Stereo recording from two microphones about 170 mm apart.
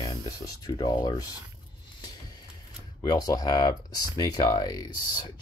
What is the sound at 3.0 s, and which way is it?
Speech, 20° left (ahead or behind).